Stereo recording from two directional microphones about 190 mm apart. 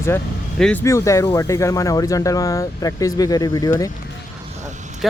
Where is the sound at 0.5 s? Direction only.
5° left (ahead or behind).